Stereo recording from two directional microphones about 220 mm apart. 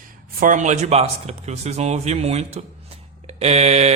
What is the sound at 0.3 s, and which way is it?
Speech, 40° right (ahead or behind).